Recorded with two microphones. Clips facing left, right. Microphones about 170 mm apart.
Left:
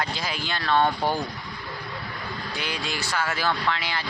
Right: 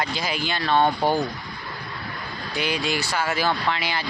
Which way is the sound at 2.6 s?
75° right (ahead or behind).